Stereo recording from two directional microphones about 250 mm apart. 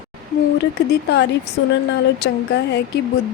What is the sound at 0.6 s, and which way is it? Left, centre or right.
Speech, left.